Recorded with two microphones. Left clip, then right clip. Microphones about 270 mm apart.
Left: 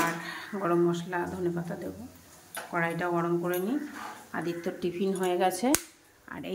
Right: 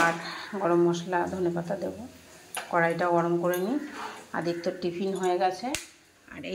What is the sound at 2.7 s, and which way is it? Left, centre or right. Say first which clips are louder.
Speech: right 5 dB; centre.